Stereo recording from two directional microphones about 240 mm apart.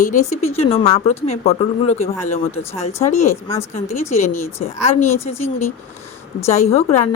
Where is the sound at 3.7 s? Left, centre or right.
Left.